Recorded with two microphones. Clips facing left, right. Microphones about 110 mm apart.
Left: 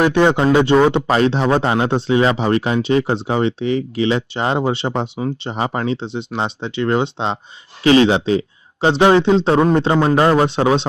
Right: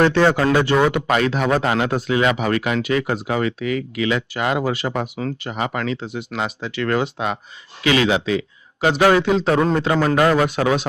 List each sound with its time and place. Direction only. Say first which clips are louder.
0.0 s speech: left 2 dB; 15° left (ahead or behind)